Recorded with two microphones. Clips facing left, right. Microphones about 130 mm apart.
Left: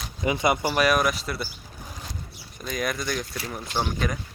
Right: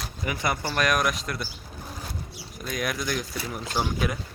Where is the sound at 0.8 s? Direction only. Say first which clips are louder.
Left 1 dB; centre (ahead or behind).